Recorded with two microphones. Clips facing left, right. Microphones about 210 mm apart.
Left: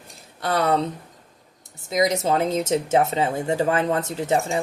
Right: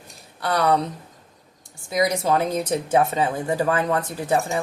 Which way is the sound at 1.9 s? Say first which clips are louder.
Even; 20° left (ahead or behind).